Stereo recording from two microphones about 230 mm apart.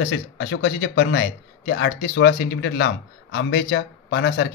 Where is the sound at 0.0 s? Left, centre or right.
Left.